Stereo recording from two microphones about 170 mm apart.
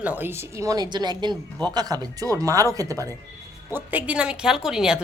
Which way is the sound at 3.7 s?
10° right (ahead or behind).